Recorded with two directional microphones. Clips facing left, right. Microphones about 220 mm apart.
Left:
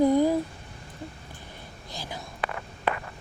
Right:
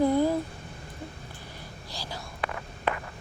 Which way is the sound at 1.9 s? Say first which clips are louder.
Left 2 dB; 20° left (ahead or behind).